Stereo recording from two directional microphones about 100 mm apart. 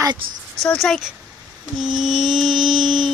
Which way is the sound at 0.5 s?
5° left (ahead or behind).